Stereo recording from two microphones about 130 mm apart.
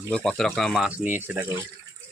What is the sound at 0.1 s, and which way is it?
Speech, 5° left (ahead or behind).